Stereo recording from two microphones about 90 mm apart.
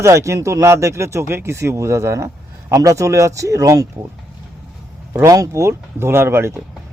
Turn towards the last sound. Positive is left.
turn(degrees=-30)  # may be behind; listen again after turning